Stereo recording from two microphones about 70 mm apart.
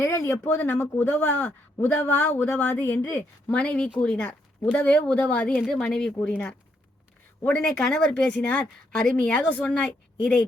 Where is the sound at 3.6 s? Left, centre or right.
Centre.